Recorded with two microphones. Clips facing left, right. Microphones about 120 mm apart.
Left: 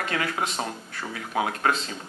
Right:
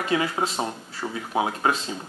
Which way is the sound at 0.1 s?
15° right (ahead or behind).